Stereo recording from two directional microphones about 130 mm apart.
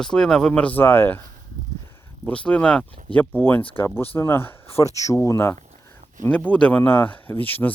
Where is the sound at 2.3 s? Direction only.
10° left (ahead or behind).